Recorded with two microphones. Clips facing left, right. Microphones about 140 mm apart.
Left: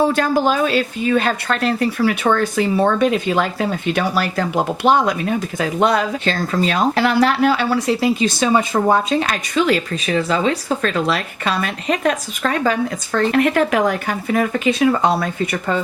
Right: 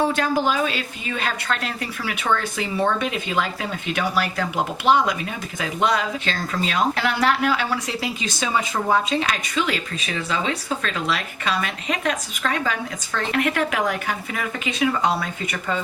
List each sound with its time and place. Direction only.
0.2 s speech: 40° left (ahead or behind)
8.7 s speech: 45° left (ahead or behind)